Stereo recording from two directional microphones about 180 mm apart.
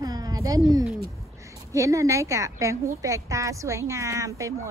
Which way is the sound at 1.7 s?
15° right (ahead or behind).